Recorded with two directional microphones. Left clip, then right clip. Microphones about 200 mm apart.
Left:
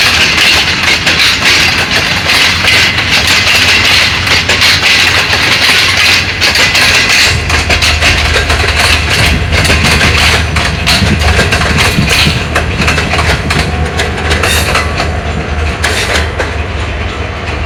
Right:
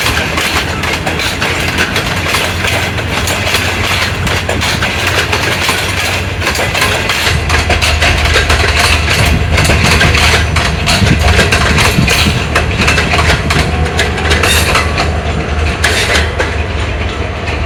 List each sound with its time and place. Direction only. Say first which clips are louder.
4.4 s train: left 7 dB; 65° right (ahead or behind)
7.7 s vehicle: left 4 dB; 65° right (ahead or behind)
11.8 s a sound: left 2 dB; 70° right (ahead or behind)